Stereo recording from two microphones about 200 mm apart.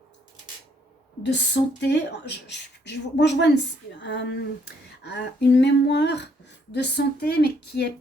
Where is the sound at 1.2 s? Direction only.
60° left (ahead or behind).